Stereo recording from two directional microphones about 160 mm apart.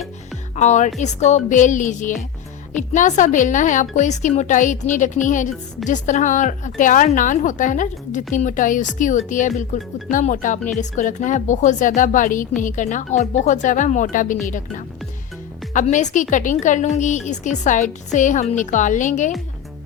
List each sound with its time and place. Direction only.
0.5 s a woman's voice: 45° left (ahead or behind)